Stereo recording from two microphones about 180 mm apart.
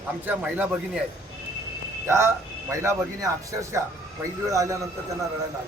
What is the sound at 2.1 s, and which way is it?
Speech, 15° right (ahead or behind).